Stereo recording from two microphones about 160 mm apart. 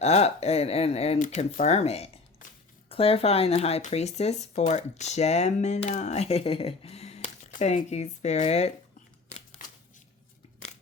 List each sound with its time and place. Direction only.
0.0 s speech: 40° left (ahead or behind)
1.2 s speech: 55° left (ahead or behind)